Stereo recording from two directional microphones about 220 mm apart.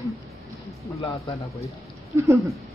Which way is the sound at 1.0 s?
15° left (ahead or behind).